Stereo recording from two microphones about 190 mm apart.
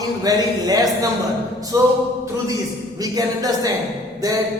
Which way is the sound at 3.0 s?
20° right (ahead or behind).